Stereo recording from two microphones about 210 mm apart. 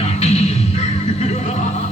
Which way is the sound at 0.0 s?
30° left (ahead or behind).